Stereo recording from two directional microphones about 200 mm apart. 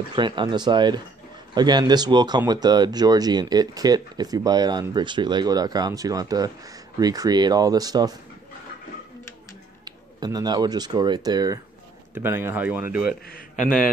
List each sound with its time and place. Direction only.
0.1 s speech: 25° right (ahead or behind)
9.8 s speech: 20° right (ahead or behind)